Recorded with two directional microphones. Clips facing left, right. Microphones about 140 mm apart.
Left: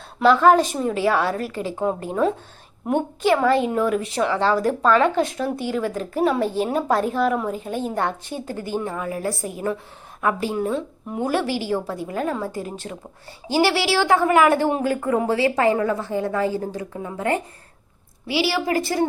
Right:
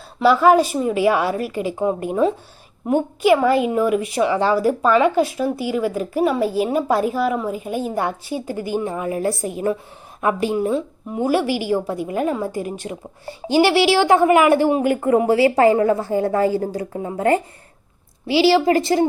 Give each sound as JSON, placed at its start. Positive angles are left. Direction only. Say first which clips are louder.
{"t": 0.2, "sound": "a woman's voice", "louder": "right 1 dB", "side_deg": -10}
{"t": 15.4, "sound": "a woman's voice", "louder": "right 5 dB", "side_deg": -25}